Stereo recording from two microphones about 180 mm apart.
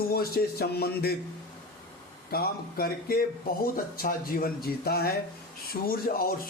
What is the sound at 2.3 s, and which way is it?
Speech, 55° left (ahead or behind).